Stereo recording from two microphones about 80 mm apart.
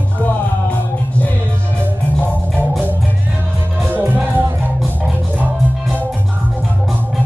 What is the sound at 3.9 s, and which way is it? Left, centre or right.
Music, right.